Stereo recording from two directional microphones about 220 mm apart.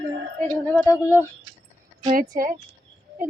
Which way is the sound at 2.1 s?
40° right (ahead or behind).